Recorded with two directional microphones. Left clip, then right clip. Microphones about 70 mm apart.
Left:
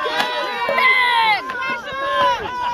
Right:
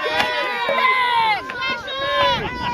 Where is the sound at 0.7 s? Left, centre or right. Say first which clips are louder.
Left 3 dB; left.